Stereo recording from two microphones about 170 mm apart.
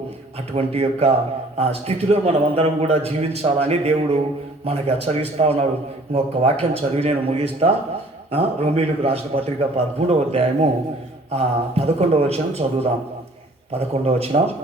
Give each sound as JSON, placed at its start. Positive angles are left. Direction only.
{"t": 0.5, "sound": "a man's voice", "side_deg": -35}